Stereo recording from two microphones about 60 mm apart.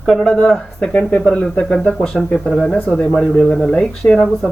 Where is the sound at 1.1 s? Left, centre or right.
Centre.